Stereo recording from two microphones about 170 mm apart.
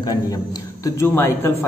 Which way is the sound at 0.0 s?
20° left (ahead or behind).